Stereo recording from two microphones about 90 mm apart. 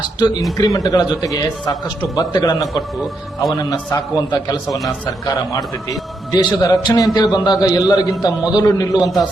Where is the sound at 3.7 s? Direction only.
50° left (ahead or behind).